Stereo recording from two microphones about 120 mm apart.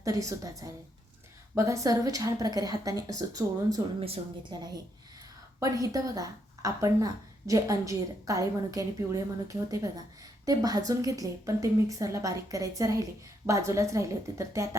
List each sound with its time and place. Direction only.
0.0 s speech: 25° right (ahead or behind)
4.0 s speech: 55° right (ahead or behind)
5.5 s speech: 30° right (ahead or behind)